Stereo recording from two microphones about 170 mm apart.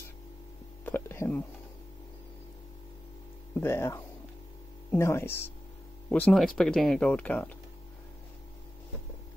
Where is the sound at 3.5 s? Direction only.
15° left (ahead or behind).